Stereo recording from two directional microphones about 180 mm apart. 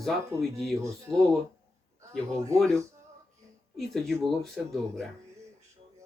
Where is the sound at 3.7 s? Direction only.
Centre (ahead or behind).